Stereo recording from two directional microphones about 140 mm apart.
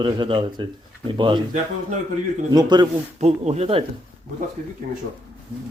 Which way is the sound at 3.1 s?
50° right (ahead or behind).